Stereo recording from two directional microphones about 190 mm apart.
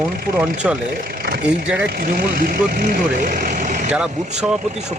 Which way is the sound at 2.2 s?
50° right (ahead or behind).